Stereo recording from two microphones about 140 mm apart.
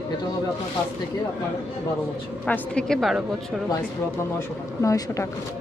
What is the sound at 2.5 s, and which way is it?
Speech, 5° left (ahead or behind).